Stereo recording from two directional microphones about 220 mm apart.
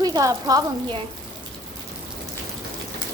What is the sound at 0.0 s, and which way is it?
A woman's voice, 15° right (ahead or behind).